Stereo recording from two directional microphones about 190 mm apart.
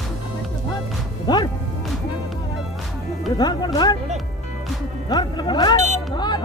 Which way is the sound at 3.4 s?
20° left (ahead or behind).